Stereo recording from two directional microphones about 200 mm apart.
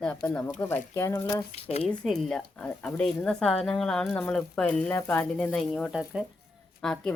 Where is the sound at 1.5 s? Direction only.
30° left (ahead or behind).